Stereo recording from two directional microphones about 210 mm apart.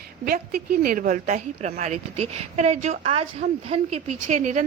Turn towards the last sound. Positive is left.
turn(degrees=-35)  # may be behind; listen again after turning